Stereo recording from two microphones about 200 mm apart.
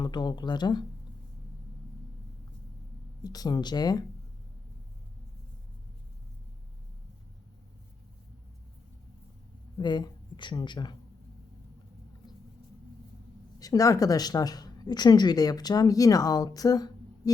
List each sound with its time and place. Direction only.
0.0 s speech: 20° left (ahead or behind)
3.2 s speech: 20° left (ahead or behind)
9.7 s speech: 20° left (ahead or behind)
13.6 s speech: 15° left (ahead or behind)